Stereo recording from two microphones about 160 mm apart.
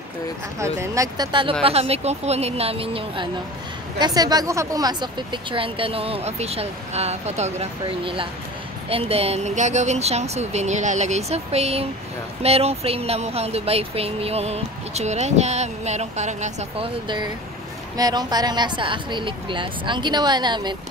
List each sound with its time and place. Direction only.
0.6 s a woman's voice: 20° right (ahead or behind)
1.6 s speech: 40° right (ahead or behind)
4.0 s a woman's voice: 25° right (ahead or behind)